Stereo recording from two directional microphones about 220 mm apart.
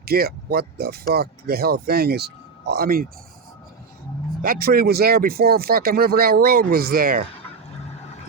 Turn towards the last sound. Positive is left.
turn(degrees=-40)  # may be behind; listen again after turning